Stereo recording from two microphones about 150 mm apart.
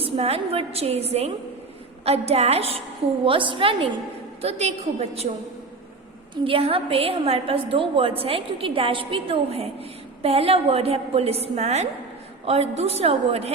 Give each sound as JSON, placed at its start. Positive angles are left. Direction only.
{"t": 0.0, "sound": "a woman's voice", "side_deg": -40}
{"t": 6.3, "sound": "a woman's voice", "side_deg": -35}